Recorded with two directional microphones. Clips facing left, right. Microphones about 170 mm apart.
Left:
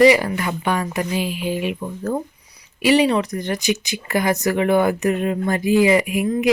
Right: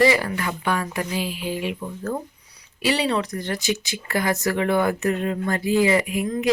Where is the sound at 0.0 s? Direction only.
15° left (ahead or behind).